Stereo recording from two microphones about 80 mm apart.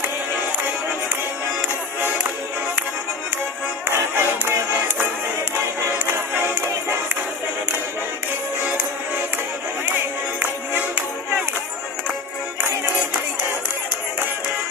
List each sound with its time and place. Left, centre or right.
3.8 s music: right
6.0 s music: right
10.4 s music: centre